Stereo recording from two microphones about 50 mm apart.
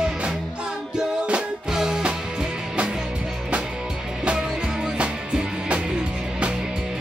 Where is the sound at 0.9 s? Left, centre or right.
Centre.